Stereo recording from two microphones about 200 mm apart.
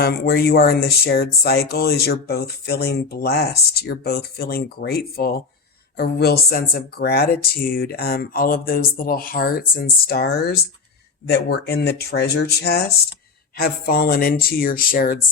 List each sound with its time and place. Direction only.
0.0 s speech: 50° left (ahead or behind)